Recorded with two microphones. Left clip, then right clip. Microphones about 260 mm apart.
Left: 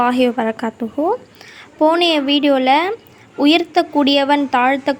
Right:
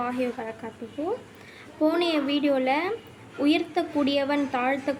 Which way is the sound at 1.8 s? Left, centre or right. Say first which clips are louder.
Left 10 dB; left.